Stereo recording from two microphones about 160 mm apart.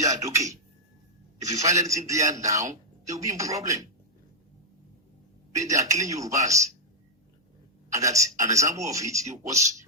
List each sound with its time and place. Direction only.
0.0 s speech: 20° right (ahead or behind)
1.6 s a man's voice: 20° right (ahead or behind)
5.5 s a man's voice: 20° right (ahead or behind)
7.9 s a man's voice: 20° right (ahead or behind)